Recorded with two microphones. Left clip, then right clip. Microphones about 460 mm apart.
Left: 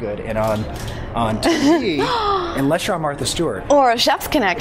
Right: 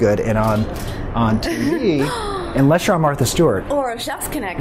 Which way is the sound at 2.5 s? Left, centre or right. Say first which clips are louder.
Right 3 dB; right.